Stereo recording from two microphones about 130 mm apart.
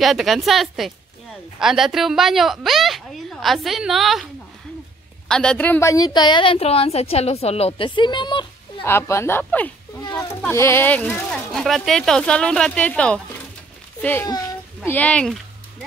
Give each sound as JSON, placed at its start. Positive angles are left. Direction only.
{"t": 0.0, "sound": "a woman's voice", "side_deg": 0}
{"t": 5.3, "sound": "a woman's voice", "side_deg": 5}
{"t": 8.8, "sound": "speech", "side_deg": 20}
{"t": 10.0, "sound": "a sound", "side_deg": 30}
{"t": 10.5, "sound": "speech", "side_deg": 20}
{"t": 14.9, "sound": "speech", "side_deg": 10}